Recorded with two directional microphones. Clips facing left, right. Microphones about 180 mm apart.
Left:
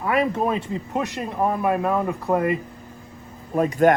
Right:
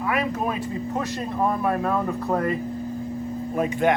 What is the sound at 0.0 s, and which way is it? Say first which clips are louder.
Speech: left 3 dB; 25° left (ahead or behind).